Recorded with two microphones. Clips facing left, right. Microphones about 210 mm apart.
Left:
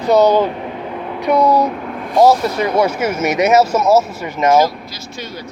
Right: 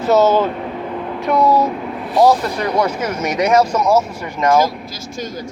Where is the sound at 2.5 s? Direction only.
20° left (ahead or behind).